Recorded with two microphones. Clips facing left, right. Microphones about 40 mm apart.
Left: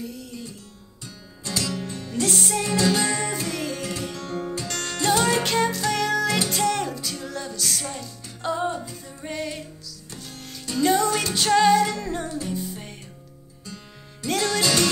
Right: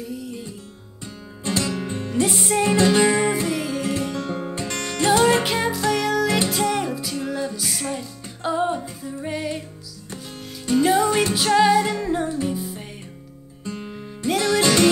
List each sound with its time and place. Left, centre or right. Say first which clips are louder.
0.0 s music: right 3 dB; centre
1.4 s music: right 4 dB; right
2.2 s music: right 3 dB; centre
3.5 s music: right 3 dB; centre
3.8 s music: right 6 dB; centre
5.4 s music: right 1 dB; centre
9.0 s music: right 4 dB; centre
10.8 s music: right 2 dB; centre
11.3 s music: left 1 dB; centre
14.2 s music: right 4 dB; centre
14.6 s music: right 5 dB; right